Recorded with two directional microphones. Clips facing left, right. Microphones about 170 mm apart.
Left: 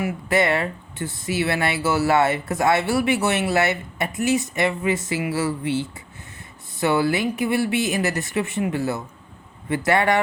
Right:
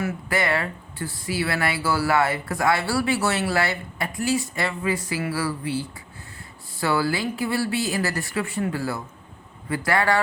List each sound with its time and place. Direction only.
0.3 s speech: 25° left (ahead or behind)